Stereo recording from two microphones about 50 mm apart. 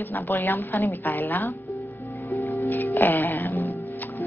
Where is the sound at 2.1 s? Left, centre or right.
Left.